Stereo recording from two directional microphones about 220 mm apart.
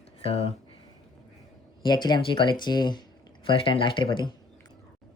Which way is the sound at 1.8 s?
20° left (ahead or behind).